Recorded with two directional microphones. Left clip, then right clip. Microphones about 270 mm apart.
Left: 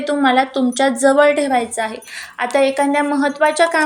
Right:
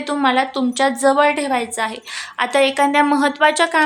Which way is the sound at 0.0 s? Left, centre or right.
Centre.